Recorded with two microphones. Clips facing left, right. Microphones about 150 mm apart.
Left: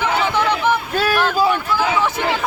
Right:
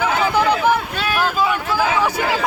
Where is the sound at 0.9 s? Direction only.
40° left (ahead or behind).